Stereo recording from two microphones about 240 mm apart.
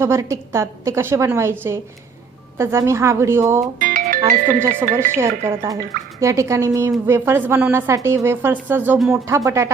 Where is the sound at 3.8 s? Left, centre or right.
Right.